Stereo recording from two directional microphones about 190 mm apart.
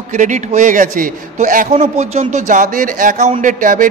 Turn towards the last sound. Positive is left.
turn(degrees=-45)  # may be behind; listen again after turning